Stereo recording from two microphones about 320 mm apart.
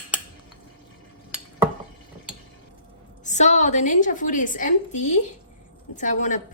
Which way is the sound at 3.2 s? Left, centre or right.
Left.